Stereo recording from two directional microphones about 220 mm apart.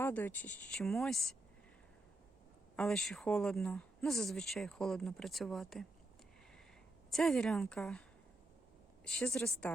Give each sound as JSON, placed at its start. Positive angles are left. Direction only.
{"t": 0.0, "sound": "speech", "side_deg": 10}
{"t": 2.7, "sound": "speech", "side_deg": 0}
{"t": 7.1, "sound": "speech", "side_deg": 0}
{"t": 9.0, "sound": "a woman's voice", "side_deg": 0}